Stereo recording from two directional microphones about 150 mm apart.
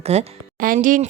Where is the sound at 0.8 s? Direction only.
65° right (ahead or behind).